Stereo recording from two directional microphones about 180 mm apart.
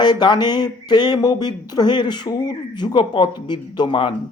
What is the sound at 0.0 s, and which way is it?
Speech, 25° left (ahead or behind).